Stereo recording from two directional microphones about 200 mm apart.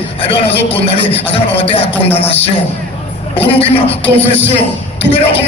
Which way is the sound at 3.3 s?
30° left (ahead or behind).